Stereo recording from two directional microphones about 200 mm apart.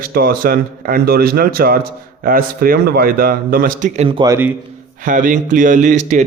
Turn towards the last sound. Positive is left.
turn(degrees=-40)  # may be behind; listen again after turning